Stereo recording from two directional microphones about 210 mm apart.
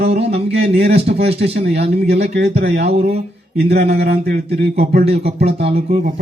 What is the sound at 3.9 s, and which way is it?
A man's voice, 50° right (ahead or behind).